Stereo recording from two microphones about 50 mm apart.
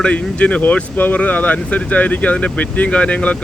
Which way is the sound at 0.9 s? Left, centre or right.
Left.